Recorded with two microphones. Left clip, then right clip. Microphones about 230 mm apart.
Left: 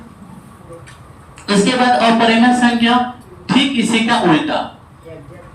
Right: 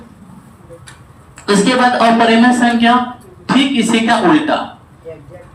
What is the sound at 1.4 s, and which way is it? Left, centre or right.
Speech, right.